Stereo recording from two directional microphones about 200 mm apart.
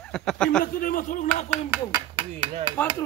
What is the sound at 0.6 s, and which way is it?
Speech, 45° left (ahead or behind).